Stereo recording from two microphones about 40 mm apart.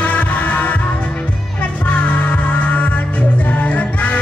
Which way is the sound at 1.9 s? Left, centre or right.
Left.